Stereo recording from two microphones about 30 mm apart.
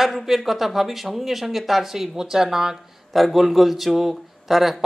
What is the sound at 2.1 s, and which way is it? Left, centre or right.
Speech, centre.